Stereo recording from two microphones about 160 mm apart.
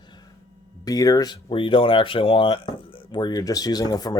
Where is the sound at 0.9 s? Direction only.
20° left (ahead or behind).